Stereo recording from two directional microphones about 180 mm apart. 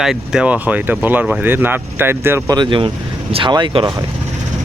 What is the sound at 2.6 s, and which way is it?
Speech, 25° right (ahead or behind).